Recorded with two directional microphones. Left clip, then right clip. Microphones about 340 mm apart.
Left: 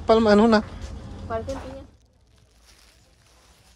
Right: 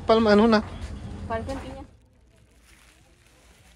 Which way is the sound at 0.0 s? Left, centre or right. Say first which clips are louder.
Left 2 dB; centre.